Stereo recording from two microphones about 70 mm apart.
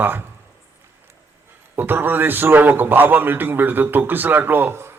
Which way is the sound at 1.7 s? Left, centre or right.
Right.